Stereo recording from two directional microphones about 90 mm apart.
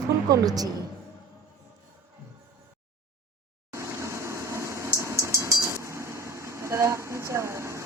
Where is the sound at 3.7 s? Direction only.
30° right (ahead or behind).